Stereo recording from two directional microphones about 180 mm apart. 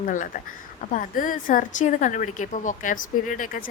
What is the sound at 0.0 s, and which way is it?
Speech, 45° left (ahead or behind).